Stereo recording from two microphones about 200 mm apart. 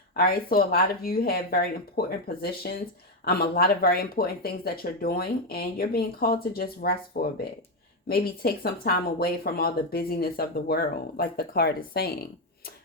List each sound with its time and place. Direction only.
0.2 s speech: 50° left (ahead or behind)